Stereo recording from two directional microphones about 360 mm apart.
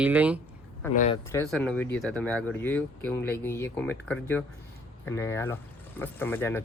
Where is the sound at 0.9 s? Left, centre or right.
Centre.